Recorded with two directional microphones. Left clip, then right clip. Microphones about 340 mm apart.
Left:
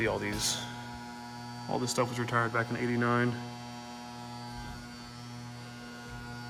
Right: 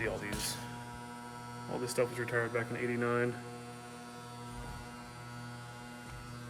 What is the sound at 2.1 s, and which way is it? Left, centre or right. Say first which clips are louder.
Speech: left 4 dB; centre.